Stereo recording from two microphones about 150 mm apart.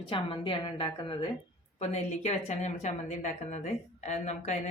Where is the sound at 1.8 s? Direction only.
45° left (ahead or behind).